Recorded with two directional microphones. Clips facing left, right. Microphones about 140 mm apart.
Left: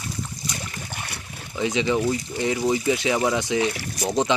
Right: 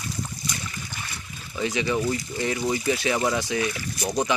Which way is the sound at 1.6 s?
20° left (ahead or behind).